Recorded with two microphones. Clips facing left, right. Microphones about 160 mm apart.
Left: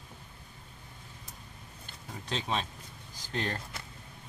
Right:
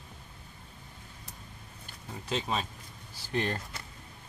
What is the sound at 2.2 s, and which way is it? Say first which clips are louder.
Speech: right 1 dB; 5° right (ahead or behind).